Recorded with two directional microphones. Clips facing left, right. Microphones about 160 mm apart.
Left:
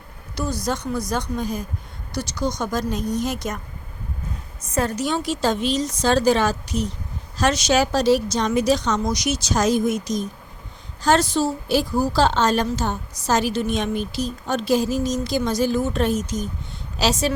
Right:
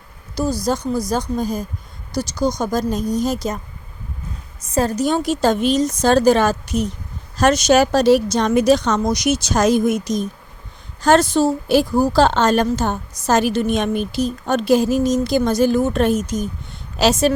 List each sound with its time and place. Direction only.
0.6 s speech: 35° right (ahead or behind)
4.7 s a woman's voice: 35° right (ahead or behind); by 17.3 s 55° right (ahead or behind)